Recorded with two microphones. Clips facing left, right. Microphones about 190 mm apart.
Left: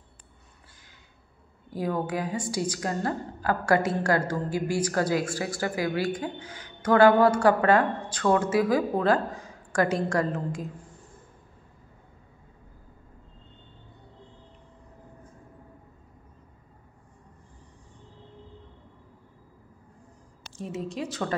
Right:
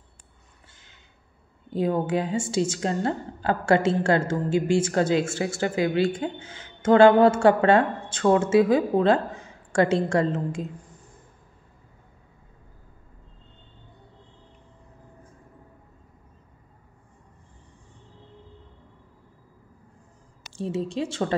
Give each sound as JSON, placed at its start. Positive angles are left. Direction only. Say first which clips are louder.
{"t": 1.7, "sound": "a woman's voice", "louder": "right 5 dB", "side_deg": -25}
{"t": 20.5, "sound": "a woman's voice", "louder": "right 5 dB", "side_deg": -30}